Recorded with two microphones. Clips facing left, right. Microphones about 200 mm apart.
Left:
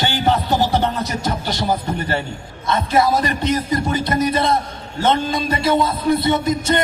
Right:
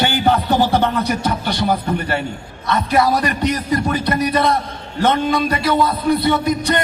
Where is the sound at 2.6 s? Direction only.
25° left (ahead or behind).